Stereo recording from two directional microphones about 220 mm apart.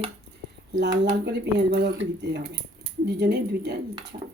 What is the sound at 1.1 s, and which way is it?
Speech, 50° right (ahead or behind).